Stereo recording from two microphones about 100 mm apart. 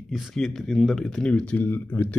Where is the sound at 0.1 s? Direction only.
5° left (ahead or behind).